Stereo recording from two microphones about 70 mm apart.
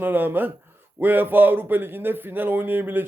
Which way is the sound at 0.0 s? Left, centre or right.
Right.